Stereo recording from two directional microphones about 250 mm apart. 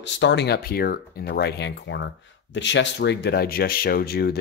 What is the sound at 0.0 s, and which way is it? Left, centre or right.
Speech, left.